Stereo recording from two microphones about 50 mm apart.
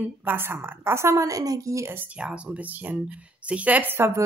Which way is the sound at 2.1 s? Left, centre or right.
Right.